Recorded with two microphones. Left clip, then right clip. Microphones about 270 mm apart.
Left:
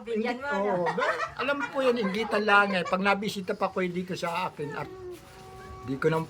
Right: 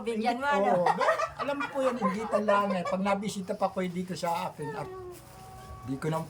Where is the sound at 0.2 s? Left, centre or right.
Right.